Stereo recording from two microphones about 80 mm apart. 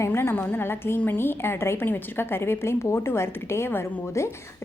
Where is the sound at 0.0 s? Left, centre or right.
Left.